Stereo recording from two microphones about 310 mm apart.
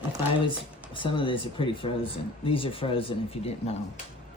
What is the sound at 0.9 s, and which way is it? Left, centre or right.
Speech, centre.